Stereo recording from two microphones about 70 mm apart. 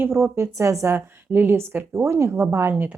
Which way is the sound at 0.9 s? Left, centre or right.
Right.